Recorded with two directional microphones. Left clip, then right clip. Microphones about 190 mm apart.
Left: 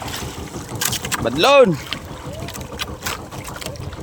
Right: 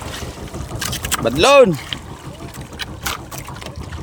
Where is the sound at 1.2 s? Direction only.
15° right (ahead or behind).